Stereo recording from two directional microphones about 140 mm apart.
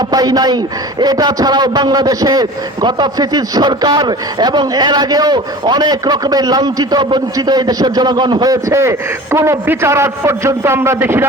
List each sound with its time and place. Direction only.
0.1 s a man's voice: 30° right (ahead or behind)